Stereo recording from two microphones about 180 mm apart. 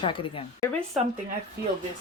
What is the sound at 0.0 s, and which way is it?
Speech, 30° left (ahead or behind).